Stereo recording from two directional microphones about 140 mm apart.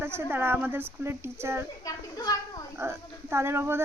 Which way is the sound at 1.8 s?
25° left (ahead or behind).